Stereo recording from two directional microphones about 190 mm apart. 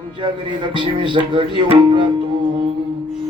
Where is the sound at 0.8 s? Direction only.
25° right (ahead or behind).